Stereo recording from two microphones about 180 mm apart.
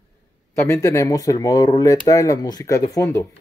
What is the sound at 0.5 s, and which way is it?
Speech, 15° left (ahead or behind).